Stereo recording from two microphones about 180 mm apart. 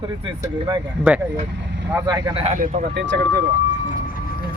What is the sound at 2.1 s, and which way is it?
Speech, 20° right (ahead or behind).